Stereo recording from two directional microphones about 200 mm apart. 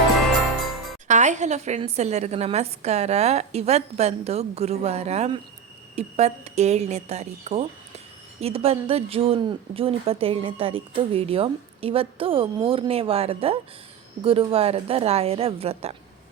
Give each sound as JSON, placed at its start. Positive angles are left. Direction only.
{"t": 1.0, "sound": "a woman's voice", "side_deg": -35}